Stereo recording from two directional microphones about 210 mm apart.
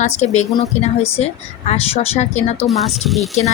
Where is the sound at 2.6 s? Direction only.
Centre (ahead or behind).